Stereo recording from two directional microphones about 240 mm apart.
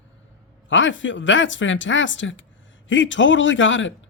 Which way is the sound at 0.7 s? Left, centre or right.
Left.